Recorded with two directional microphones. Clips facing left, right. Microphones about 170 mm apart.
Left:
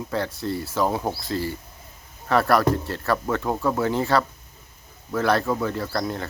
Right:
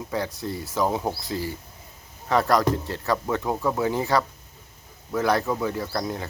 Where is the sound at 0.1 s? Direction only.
15° right (ahead or behind).